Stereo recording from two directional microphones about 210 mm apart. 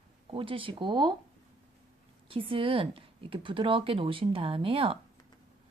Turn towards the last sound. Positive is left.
turn(degrees=-25)  # may be behind; listen again after turning